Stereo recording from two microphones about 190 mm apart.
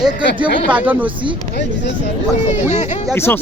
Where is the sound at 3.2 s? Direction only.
10° left (ahead or behind).